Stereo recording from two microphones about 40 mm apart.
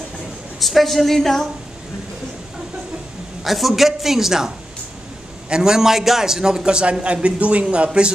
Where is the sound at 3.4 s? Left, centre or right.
Centre.